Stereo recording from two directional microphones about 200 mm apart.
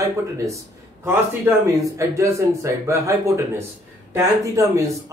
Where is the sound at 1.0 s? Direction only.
15° right (ahead or behind).